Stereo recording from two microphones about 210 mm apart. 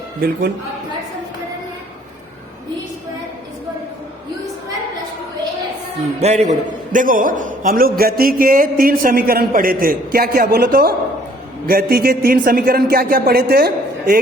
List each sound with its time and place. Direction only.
0.2 s a man's voice: 45° right (ahead or behind)
6.1 s a man's voice: 30° right (ahead or behind); by 14.2 s 45° right (ahead or behind)